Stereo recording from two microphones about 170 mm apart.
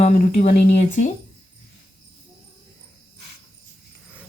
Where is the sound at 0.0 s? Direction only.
40° left (ahead or behind).